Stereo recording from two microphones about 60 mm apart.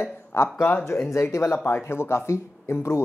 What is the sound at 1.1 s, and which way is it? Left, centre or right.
A woman's voice, left.